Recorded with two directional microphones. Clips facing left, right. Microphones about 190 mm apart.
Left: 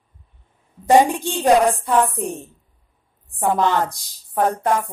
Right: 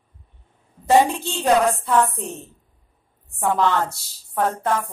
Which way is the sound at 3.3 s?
15° left (ahead or behind).